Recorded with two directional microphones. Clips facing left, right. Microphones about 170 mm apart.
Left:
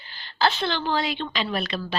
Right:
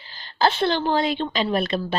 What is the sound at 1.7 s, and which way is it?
Speech, 45° right (ahead or behind).